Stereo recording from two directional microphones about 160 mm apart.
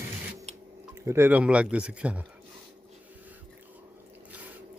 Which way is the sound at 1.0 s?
15° right (ahead or behind).